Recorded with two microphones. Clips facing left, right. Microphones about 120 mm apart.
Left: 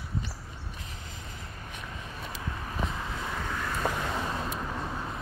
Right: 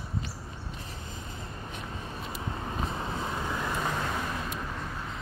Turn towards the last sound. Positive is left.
turn(degrees=25)  # may be behind; listen again after turning